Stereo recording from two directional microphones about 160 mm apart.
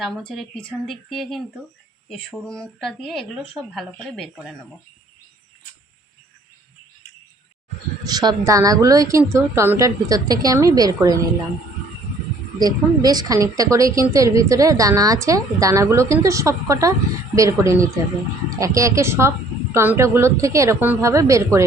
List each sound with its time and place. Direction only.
0.0 s a woman's voice: 5° left (ahead or behind)
8.0 s a woman's voice: 25° right (ahead or behind)
12.5 s a woman's voice: 25° right (ahead or behind)